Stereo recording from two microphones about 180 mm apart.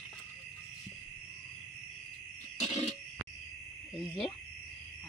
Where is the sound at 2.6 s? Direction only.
35° left (ahead or behind).